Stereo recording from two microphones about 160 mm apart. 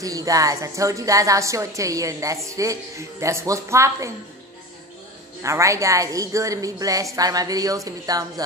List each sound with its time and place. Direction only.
0.0 s a woman's voice: 20° right (ahead or behind)
5.4 s a woman's voice: 20° right (ahead or behind)